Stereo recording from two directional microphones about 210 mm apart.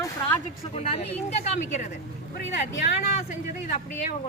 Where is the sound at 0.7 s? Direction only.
30° left (ahead or behind).